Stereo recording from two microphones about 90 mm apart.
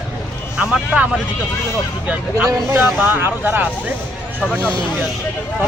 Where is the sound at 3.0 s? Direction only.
25° right (ahead or behind).